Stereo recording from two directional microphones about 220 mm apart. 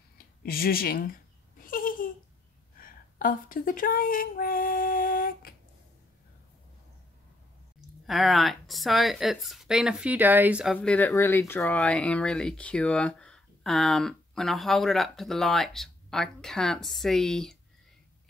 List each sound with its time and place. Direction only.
0.4 s speech: 45° left (ahead or behind)
1.7 s a sound: 40° left (ahead or behind)
2.8 s speech: 40° left (ahead or behind)
8.1 s speech: centre (ahead or behind)